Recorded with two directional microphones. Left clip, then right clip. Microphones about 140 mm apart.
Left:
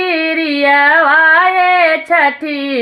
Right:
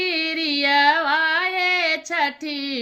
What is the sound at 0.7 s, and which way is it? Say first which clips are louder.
Music: left 9 dB; 15° right (ahead or behind).